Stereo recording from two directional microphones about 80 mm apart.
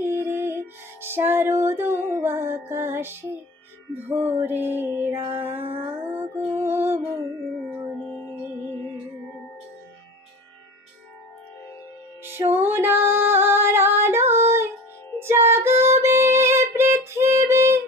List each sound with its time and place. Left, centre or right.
0.0 s music: right
12.3 s music: right